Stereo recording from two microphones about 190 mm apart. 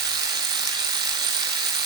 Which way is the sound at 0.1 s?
20° right (ahead or behind).